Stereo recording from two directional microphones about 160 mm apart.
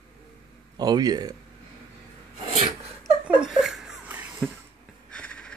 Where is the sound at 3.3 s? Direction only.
5° right (ahead or behind).